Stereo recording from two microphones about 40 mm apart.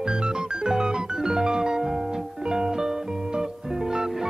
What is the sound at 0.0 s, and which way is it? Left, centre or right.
Organ, centre.